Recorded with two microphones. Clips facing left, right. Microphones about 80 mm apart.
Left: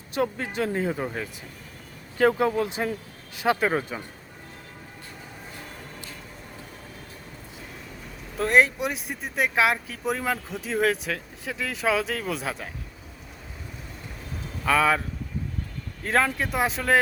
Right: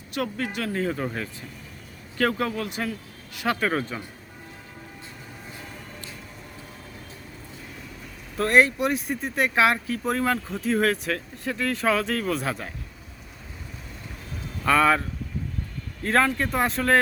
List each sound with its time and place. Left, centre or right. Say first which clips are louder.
0.1 s speech: left 2 dB; left
8.4 s speech: right 1 dB; centre
14.6 s a man's voice: right 2 dB; centre
16.0 s speech: right 2 dB; centre